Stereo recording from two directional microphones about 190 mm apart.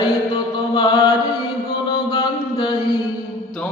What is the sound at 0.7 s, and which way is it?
Chant, 25° left (ahead or behind).